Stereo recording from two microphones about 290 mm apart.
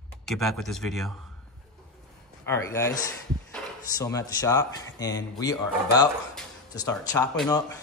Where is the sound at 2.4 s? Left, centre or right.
Centre.